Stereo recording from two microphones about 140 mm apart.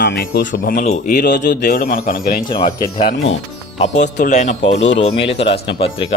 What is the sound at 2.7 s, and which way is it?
Speech, 25° left (ahead or behind).